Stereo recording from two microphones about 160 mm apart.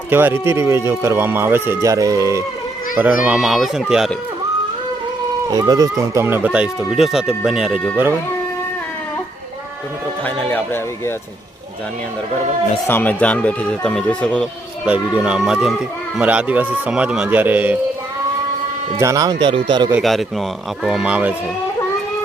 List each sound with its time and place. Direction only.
0.1 s speech: 15° right (ahead or behind)
3.2 s speech: centre (ahead or behind)
5.5 s speech: 25° right (ahead or behind); by 8.1 s 10° right (ahead or behind)
10.2 s speech: 10° left (ahead or behind)
12.9 s speech: 10° left (ahead or behind)
14.8 s speech: 5° right (ahead or behind)
18.9 s speech: 20° right (ahead or behind)
20.0 s speech: centre (ahead or behind)